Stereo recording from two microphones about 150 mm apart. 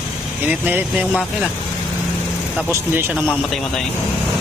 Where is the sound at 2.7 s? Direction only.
15° right (ahead or behind).